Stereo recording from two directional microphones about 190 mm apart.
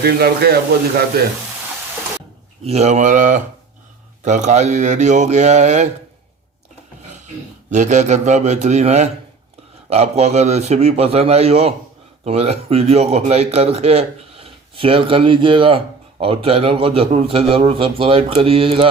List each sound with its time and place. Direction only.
0.0 s speech: 55° right (ahead or behind)
2.6 s speech: 35° right (ahead or behind)
7.7 s speech: 40° right (ahead or behind)